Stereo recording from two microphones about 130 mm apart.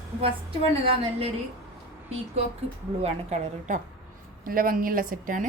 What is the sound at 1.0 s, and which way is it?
Speech, 50° right (ahead or behind).